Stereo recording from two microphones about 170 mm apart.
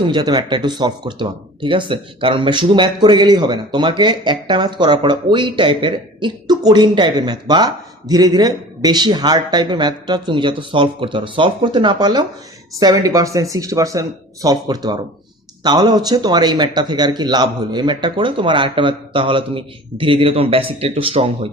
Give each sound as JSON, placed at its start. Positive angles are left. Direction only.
{"t": 0.1, "sound": "speech", "side_deg": -25}